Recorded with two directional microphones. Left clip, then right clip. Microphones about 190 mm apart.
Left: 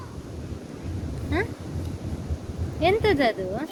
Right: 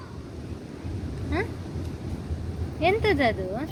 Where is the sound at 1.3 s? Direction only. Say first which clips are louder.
Left 2 dB; 10° left (ahead or behind).